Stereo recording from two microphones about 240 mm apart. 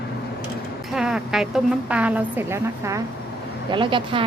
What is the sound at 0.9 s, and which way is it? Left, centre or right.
A woman's voice, centre.